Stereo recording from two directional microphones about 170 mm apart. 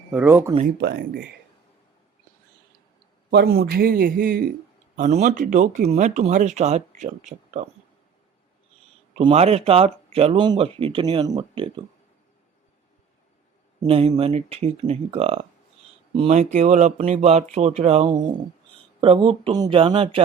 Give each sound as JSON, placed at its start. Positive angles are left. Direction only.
{"t": 0.1, "sound": "speech", "side_deg": -10}
{"t": 0.8, "sound": "speech", "side_deg": -70}
{"t": 3.2, "sound": "a man's voice", "side_deg": -60}
{"t": 4.9, "sound": "speech", "side_deg": -45}
{"t": 9.1, "sound": "speech", "side_deg": -40}
{"t": 13.8, "sound": "speech", "side_deg": -35}